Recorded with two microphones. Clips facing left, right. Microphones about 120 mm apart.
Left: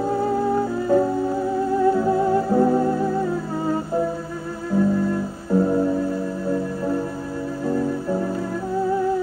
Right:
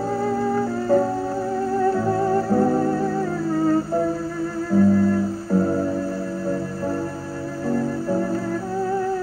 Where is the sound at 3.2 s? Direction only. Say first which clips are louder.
Right 2 dB; 15° left (ahead or behind).